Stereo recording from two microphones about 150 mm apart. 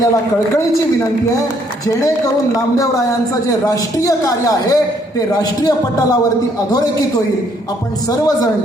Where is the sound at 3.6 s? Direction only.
25° left (ahead or behind).